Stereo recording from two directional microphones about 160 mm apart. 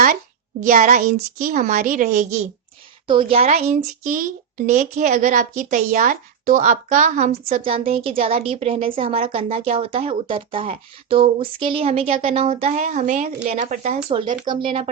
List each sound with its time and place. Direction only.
0.6 s a woman's voice: 55° right (ahead or behind)
3.1 s a child's voice: 35° right (ahead or behind); by 14.0 s 50° right (ahead or behind)
14.4 s a child's voice: 30° right (ahead or behind)